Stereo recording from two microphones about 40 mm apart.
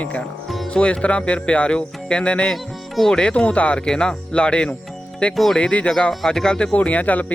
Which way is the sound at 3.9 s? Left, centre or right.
Left.